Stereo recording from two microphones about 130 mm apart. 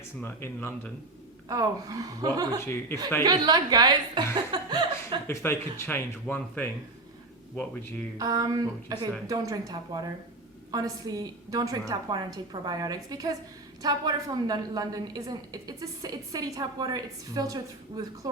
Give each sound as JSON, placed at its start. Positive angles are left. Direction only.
{"t": 0.2, "sound": "speech", "side_deg": 15}
{"t": 1.5, "sound": "a woman's voice", "side_deg": -25}
{"t": 2.6, "sound": "speech", "side_deg": 20}
{"t": 3.2, "sound": "a woman's voice", "side_deg": -30}
{"t": 4.5, "sound": "chuckle", "side_deg": -35}
{"t": 5.3, "sound": "speech", "side_deg": 20}
{"t": 8.2, "sound": "a woman's voice", "side_deg": -30}